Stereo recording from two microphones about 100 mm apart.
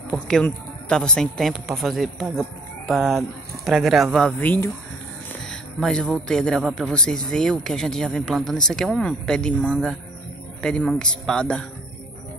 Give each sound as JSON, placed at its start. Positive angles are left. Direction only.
{"t": 0.1, "sound": "speech", "side_deg": 5}
{"t": 4.4, "sound": "speech", "side_deg": 15}
{"t": 5.5, "sound": "speech", "side_deg": 5}